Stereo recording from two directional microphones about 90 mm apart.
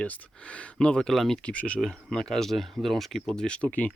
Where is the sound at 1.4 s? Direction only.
15° left (ahead or behind).